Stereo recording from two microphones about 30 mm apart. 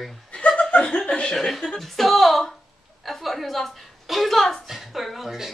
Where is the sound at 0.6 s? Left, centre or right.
Left.